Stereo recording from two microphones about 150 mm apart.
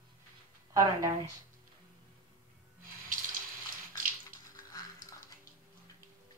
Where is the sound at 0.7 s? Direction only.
20° right (ahead or behind).